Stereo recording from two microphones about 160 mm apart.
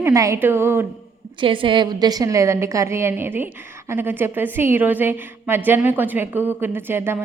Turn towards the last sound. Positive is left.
turn(degrees=-15)  # may be behind; listen again after turning